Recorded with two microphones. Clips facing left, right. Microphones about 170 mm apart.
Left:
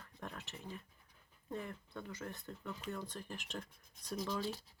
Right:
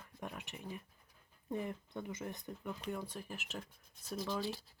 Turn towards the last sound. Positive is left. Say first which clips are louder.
# right 1 dB
turn(degrees=0)  # may be behind; listen again after turning